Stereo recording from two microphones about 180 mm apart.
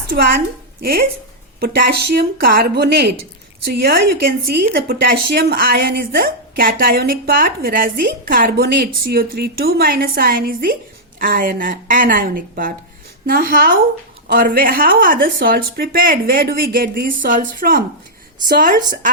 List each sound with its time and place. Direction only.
0.1 s a woman's voice: 60° right (ahead or behind)